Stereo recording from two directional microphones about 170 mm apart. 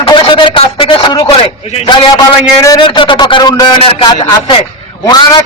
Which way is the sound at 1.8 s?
20° left (ahead or behind).